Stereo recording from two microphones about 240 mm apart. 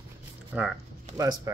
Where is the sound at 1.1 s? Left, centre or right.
Centre.